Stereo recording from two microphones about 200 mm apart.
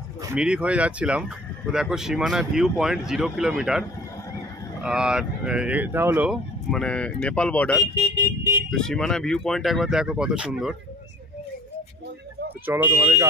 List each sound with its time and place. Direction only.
0.3 s speech: 5° right (ahead or behind)
4.8 s speech: 5° right (ahead or behind)
6.7 s speech: 5° left (ahead or behind)
12.6 s speech: 10° right (ahead or behind)